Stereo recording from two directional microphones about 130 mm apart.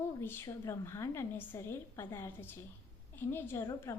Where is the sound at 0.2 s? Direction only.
20° left (ahead or behind).